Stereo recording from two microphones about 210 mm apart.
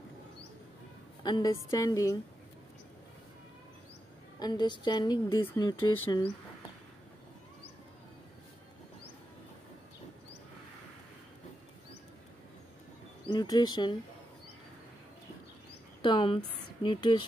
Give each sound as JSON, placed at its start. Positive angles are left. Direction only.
{"t": 1.2, "sound": "a woman's voice", "side_deg": 20}
{"t": 4.4, "sound": "a woman's voice", "side_deg": 20}
{"t": 13.2, "sound": "a woman's voice", "side_deg": 20}
{"t": 16.0, "sound": "a woman's voice", "side_deg": 25}